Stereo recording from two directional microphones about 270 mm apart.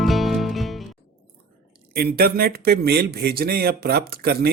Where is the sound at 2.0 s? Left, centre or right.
Right.